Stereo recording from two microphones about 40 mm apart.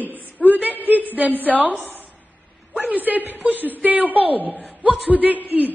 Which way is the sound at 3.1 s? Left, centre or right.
Right.